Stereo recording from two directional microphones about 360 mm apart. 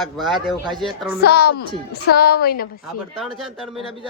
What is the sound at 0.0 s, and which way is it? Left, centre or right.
A woman's voice, centre.